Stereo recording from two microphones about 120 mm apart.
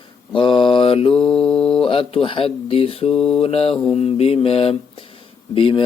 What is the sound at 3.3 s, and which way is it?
Mantra, 55° left (ahead or behind).